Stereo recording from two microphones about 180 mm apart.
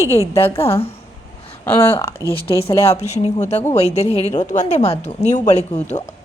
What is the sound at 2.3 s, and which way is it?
Speech, 30° left (ahead or behind).